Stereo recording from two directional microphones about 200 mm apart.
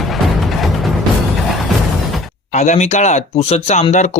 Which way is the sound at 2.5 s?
35° left (ahead or behind).